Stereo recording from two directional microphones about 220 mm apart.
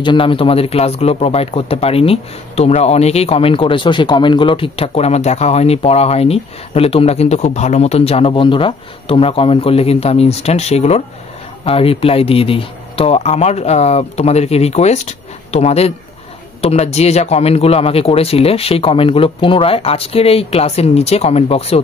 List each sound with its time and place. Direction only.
0.0 s a man's voice: 20° left (ahead or behind)